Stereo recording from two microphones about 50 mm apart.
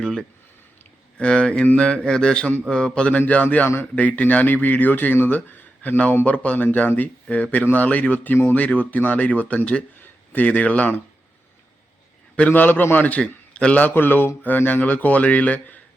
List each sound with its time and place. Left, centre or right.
1.2 s a man's voice: centre
3.2 s speech: left
6.2 s speech: left
12.5 s speech: left
13.7 s speech: left